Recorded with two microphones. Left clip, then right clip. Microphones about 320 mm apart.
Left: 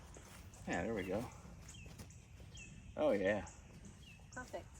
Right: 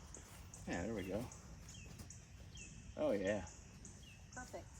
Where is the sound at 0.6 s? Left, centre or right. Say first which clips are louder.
Left 4 dB; centre.